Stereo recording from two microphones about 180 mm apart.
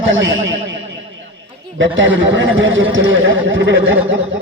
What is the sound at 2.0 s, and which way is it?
Speech, 90° right.